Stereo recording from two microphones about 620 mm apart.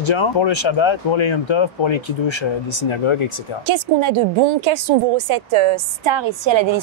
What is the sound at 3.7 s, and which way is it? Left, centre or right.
A woman's voice, right.